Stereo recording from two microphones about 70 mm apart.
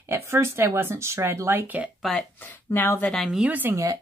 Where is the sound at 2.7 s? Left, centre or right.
Left.